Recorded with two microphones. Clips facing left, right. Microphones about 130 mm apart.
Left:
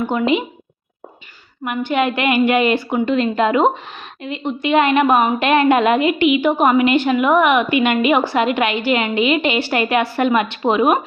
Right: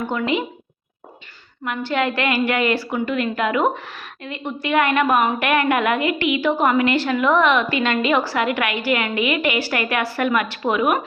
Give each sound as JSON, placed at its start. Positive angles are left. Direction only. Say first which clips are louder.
{"t": 0.0, "sound": "speech", "louder": "left 4 dB", "side_deg": 20}
{"t": 1.6, "sound": "speech", "louder": "left 3 dB", "side_deg": 20}